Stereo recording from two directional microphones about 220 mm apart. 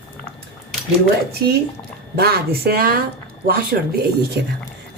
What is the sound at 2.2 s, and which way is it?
Speech, 45° right (ahead or behind).